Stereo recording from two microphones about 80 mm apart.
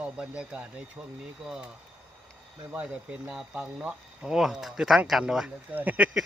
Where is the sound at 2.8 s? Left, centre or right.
Centre.